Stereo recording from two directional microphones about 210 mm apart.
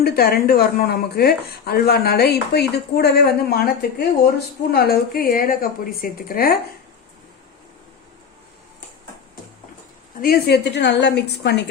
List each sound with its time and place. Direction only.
0.0 s speech: 45° left (ahead or behind)
10.2 s speech: 45° left (ahead or behind)